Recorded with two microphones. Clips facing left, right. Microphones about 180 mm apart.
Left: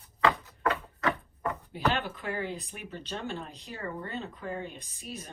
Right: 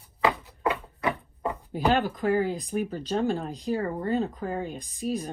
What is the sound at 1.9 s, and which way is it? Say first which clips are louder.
Speech: right 10 dB; 40° right (ahead or behind).